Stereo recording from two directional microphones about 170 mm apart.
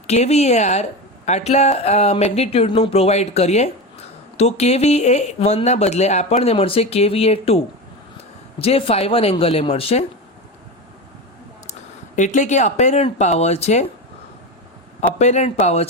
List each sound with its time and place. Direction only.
0.1 s speech: 40° left (ahead or behind)
11.6 s speech: 45° left (ahead or behind)
15.2 s speech: 45° left (ahead or behind)